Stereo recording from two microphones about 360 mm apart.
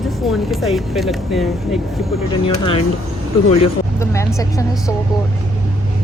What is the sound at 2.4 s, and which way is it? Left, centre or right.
Speech, centre.